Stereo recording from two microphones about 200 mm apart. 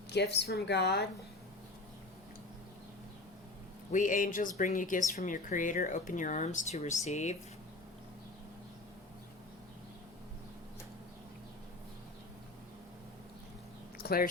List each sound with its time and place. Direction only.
0.1 s a woman's voice: 55° left (ahead or behind)
3.9 s speech: 40° left (ahead or behind)
14.0 s keys jangling: 45° left (ahead or behind)